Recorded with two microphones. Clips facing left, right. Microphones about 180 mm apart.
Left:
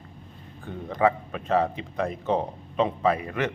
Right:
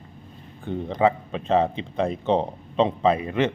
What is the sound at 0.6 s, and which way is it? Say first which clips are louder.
Speech: right 2 dB; 25° right (ahead or behind).